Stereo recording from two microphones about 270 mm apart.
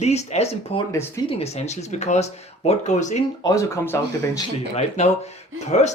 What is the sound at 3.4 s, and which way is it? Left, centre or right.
Speech, centre.